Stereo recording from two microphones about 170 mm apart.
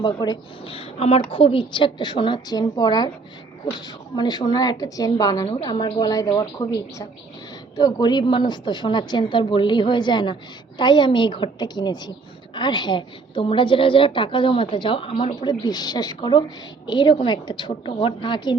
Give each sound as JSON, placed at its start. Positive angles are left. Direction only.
{"t": 0.0, "sound": "a woman's voice", "side_deg": 25}